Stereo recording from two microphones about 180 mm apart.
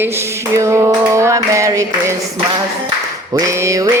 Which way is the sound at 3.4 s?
15° right (ahead or behind).